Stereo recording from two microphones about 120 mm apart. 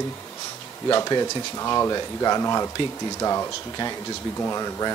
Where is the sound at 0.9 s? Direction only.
30° left (ahead or behind).